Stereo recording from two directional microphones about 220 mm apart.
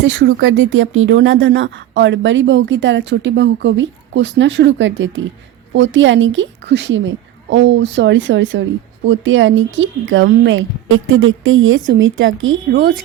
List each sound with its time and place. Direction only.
0.0 s speech: 55° right (ahead or behind)